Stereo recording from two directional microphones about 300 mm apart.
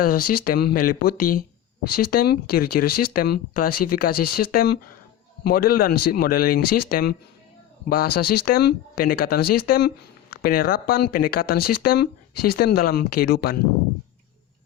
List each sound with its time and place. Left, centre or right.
0.0 s speech: left